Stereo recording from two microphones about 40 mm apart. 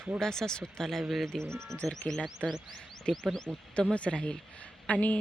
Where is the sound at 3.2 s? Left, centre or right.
Centre.